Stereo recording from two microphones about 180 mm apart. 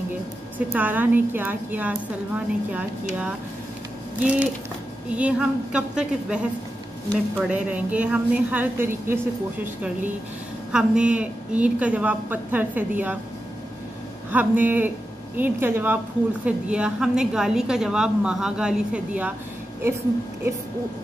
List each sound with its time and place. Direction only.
0.7 s a woman's voice: 10° right (ahead or behind)
4.2 s a woman's voice: 10° right (ahead or behind)
7.4 s a woman's voice: 5° right (ahead or behind)
10.7 s a woman's voice: 5° right (ahead or behind)
14.3 s a woman's voice: 10° right (ahead or behind)